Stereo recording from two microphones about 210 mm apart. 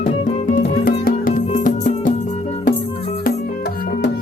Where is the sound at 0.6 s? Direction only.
40° left (ahead or behind).